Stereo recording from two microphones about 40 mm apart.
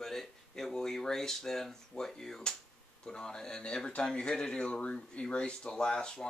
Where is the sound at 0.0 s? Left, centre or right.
Centre.